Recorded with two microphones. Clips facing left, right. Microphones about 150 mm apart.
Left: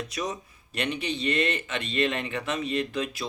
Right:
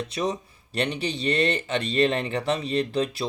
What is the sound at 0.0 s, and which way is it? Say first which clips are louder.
Speech: right 5 dB; 30° right (ahead or behind).